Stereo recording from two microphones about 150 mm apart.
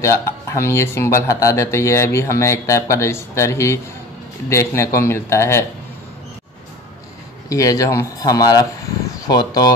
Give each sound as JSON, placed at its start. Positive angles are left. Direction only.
{"t": 0.0, "sound": "speech", "side_deg": 20}
{"t": 7.4, "sound": "speech", "side_deg": 20}